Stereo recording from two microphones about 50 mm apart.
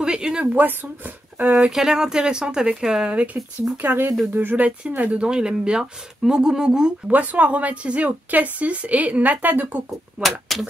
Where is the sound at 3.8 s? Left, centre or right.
Right.